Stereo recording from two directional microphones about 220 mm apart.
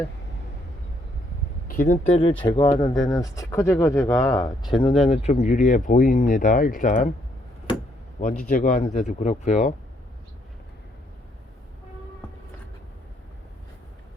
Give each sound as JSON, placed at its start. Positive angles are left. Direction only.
{"t": 1.6, "sound": "speech", "side_deg": 40}
{"t": 2.4, "sound": "speech", "side_deg": 20}
{"t": 8.2, "sound": "speech", "side_deg": 35}